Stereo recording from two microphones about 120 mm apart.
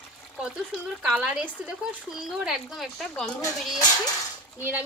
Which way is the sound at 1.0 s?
10° right (ahead or behind).